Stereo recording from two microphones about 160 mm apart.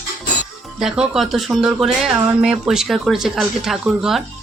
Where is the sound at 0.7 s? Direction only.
5° right (ahead or behind).